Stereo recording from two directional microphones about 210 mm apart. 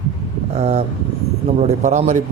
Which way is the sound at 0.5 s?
30° right (ahead or behind).